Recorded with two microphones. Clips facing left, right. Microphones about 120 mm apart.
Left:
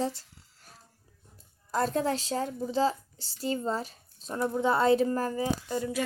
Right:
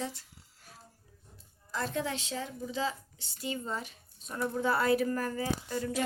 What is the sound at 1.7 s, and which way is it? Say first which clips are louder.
A woman's voice: left 6 dB; 40° left (ahead or behind).